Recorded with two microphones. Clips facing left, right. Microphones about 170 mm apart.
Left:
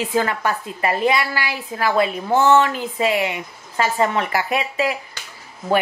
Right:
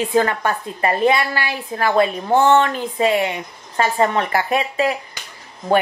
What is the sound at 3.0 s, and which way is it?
A woman's voice, 35° right (ahead or behind).